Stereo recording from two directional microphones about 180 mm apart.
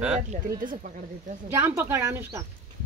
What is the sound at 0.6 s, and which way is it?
Speech, 50° right (ahead or behind).